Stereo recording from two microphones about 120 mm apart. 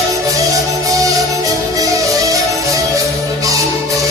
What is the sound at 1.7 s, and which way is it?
Music, 30° right (ahead or behind).